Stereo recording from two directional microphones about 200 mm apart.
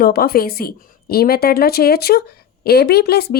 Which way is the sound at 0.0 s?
50° left (ahead or behind).